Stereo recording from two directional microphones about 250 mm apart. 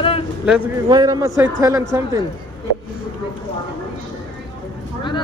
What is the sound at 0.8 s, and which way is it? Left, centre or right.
A man's voice, centre.